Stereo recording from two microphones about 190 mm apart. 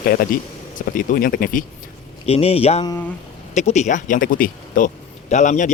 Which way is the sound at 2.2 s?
30° left (ahead or behind).